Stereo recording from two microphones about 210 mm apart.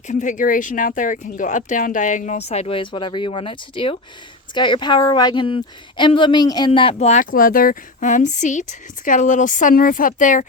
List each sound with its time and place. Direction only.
0.1 s a woman's voice: 35° left (ahead or behind)